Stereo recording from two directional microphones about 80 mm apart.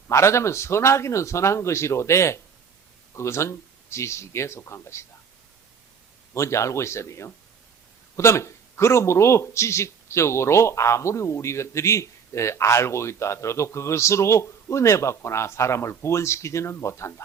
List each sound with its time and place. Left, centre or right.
0.1 s a man's voice: left
6.3 s a man's voice: left